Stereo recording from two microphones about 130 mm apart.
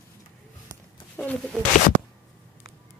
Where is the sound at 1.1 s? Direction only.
10° left (ahead or behind).